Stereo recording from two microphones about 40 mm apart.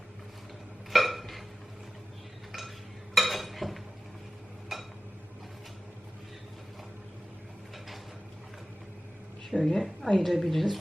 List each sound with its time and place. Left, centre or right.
0.9 s burping: centre
2.5 s a sound: centre
3.2 s cutlery: centre
4.7 s a sound: centre
9.6 s a woman's voice: left
10.2 s a woman's voice: centre